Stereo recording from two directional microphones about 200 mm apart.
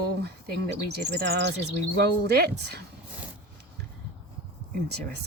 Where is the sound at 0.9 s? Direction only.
55° right (ahead or behind).